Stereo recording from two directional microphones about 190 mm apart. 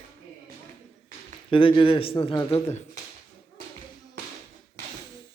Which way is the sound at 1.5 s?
25° left (ahead or behind).